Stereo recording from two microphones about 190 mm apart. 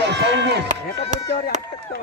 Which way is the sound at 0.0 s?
65° right (ahead or behind).